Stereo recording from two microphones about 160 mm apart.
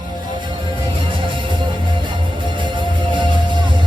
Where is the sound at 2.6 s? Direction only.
30° right (ahead or behind).